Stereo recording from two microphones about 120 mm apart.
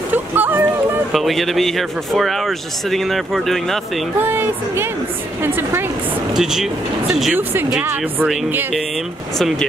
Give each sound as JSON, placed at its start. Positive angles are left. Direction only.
{"t": 0.1, "sound": "speech", "side_deg": -15}
{"t": 1.1, "sound": "speech", "side_deg": 0}
{"t": 4.2, "sound": "a woman's voice", "side_deg": -20}
{"t": 6.3, "sound": "speech", "side_deg": -5}
{"t": 7.8, "sound": "speech", "side_deg": -20}